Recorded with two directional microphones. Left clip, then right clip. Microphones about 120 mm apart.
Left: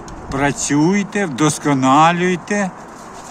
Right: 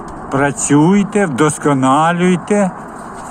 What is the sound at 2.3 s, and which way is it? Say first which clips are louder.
Speech: right 5 dB; 25° right (ahead or behind).